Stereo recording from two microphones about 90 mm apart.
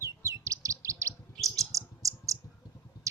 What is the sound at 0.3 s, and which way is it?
Chirp, 35° right (ahead or behind).